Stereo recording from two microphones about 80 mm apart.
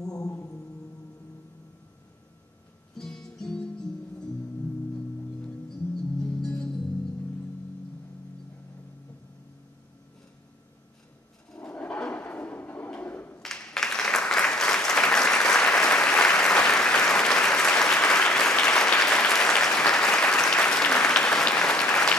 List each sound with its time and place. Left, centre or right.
0.0 s mantra: left
3.0 s music: centre
6.2 s music: centre
11.5 s a sound: centre
13.4 s applause: centre